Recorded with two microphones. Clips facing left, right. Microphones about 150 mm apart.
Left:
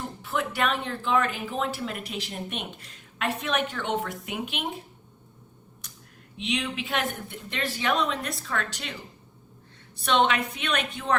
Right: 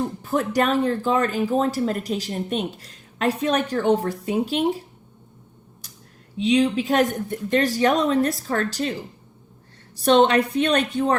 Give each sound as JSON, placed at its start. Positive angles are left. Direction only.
{"t": 0.2, "sound": "speech", "side_deg": -40}
{"t": 6.4, "sound": "speech", "side_deg": -35}
{"t": 10.0, "sound": "speech", "side_deg": -40}